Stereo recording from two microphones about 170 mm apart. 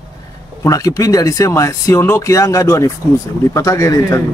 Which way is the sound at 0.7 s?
20° left (ahead or behind).